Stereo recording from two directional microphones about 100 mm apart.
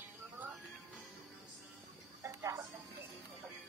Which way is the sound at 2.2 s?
30° right (ahead or behind).